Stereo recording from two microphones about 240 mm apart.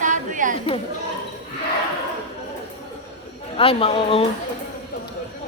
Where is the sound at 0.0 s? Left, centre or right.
Right.